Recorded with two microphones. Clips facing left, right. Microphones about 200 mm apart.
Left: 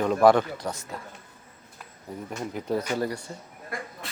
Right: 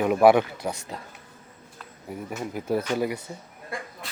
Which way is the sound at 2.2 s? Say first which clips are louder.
Right 1 dB; 5° right (ahead or behind).